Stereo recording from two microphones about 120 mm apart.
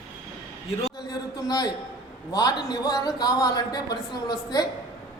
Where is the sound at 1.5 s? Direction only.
35° left (ahead or behind).